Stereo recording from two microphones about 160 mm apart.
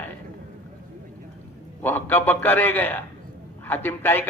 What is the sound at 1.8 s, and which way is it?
A man's voice, 10° left (ahead or behind).